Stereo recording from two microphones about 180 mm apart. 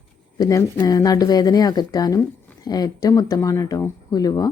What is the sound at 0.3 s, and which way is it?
Speech, 20° left (ahead or behind).